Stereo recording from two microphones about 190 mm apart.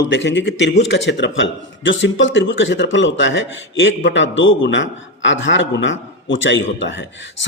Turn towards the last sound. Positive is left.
turn(degrees=75)  # may be behind; listen again after turning